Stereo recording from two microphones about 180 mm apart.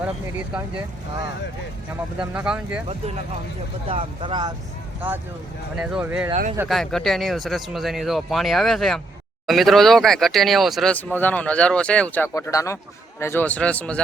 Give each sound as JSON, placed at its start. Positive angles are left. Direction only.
{"t": 0.0, "sound": "speech", "side_deg": -10}
{"t": 2.1, "sound": "speech", "side_deg": -5}
{"t": 3.8, "sound": "speech", "side_deg": -30}
{"t": 4.9, "sound": "speech", "side_deg": -10}
{"t": 6.7, "sound": "speech", "side_deg": 0}
{"t": 12.3, "sound": "a man's voice", "side_deg": 20}